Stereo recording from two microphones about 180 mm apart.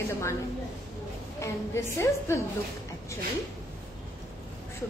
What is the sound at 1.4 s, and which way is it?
A woman's voice, 15° left (ahead or behind).